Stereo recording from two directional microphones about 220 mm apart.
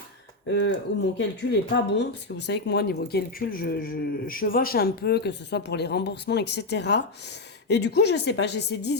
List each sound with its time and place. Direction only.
1.2 s speech: 50° left (ahead or behind)